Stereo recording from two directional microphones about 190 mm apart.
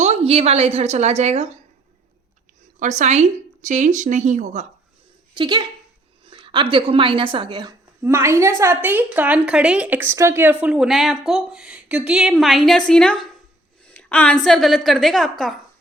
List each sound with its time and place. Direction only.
0.0 s speech: 35° right (ahead or behind)
2.7 s speech: 40° right (ahead or behind)
5.3 s a woman's voice: 25° right (ahead or behind); by 15.5 s centre (ahead or behind)